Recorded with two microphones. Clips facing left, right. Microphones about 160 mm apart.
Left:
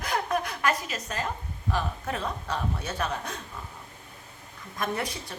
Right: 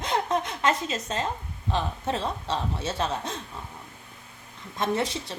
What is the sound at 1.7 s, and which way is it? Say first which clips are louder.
A woman's voice: right 2 dB; 25° right (ahead or behind).